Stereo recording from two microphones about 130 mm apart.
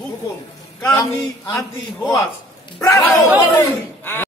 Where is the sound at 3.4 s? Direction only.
20° left (ahead or behind).